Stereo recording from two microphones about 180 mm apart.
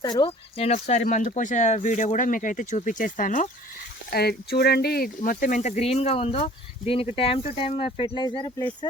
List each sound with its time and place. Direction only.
0.0 s speech: 25° left (ahead or behind); by 3.5 s 45° left (ahead or behind)
4.1 s speech: 60° left (ahead or behind); by 8.6 s 25° left (ahead or behind)